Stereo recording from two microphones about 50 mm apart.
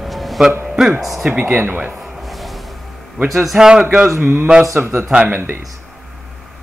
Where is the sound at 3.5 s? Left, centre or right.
Centre.